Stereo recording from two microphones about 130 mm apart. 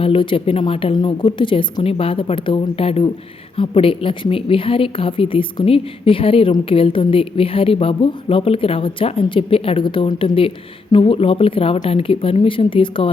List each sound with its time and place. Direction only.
0.0 s speech: 45° left (ahead or behind)